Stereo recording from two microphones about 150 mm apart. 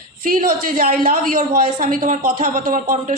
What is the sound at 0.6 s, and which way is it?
Speech, 65° right (ahead or behind).